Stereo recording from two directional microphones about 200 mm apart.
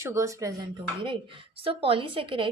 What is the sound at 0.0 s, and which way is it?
A woman's voice, 15° right (ahead or behind).